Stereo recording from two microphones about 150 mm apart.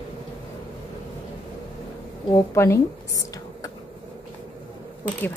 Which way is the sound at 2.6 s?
20° left (ahead or behind).